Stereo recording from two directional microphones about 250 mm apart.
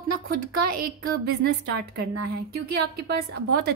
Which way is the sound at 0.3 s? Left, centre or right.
Right.